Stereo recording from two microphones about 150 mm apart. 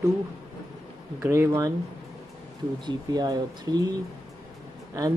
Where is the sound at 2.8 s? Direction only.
25° right (ahead or behind).